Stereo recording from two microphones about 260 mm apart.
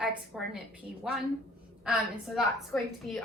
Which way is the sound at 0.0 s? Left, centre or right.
Centre.